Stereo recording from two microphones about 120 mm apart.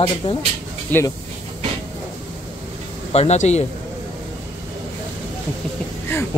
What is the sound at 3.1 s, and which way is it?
Speech, 65° left (ahead or behind).